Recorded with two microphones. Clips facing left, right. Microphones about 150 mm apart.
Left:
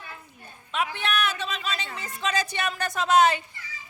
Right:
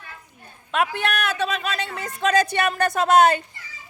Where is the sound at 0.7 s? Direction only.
55° right (ahead or behind).